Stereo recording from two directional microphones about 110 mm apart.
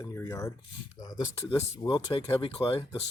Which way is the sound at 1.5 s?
45° left (ahead or behind).